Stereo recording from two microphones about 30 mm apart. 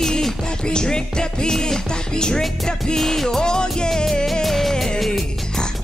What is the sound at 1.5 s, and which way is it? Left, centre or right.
Music, centre.